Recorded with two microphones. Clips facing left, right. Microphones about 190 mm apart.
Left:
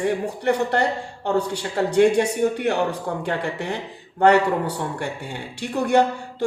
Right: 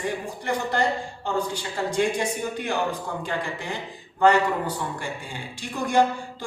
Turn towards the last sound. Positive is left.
turn(degrees=65)  # may be behind; listen again after turning